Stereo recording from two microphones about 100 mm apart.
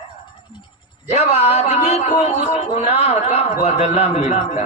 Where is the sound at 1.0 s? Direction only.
90° left.